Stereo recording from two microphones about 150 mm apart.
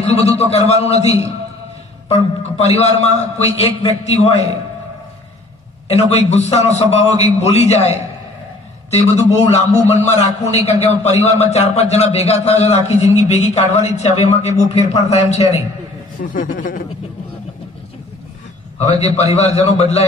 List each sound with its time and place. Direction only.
0.0 s a man's voice: 45° left (ahead or behind)
5.9 s a man's voice: 45° left (ahead or behind)
16.2 s a man's voice: 65° left (ahead or behind)
18.8 s a man's voice: 45° left (ahead or behind)